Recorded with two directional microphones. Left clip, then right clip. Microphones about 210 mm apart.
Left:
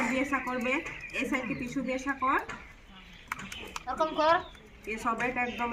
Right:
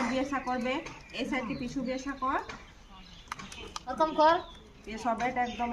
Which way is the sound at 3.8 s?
65° right (ahead or behind).